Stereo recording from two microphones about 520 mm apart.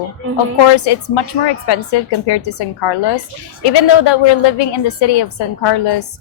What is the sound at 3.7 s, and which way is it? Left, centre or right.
A woman's voice, left.